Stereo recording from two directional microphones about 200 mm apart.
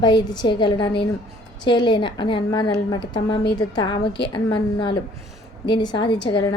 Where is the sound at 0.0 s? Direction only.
20° left (ahead or behind).